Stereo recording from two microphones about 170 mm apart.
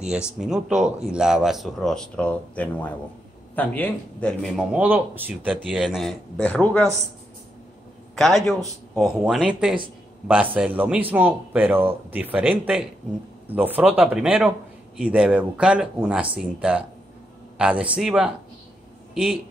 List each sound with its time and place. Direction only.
0.4 s speech: 5° right (ahead or behind)
4.7 s a man's voice: 10° right (ahead or behind); by 6.9 s 10° left (ahead or behind)
8.2 s a man's voice: centre (ahead or behind)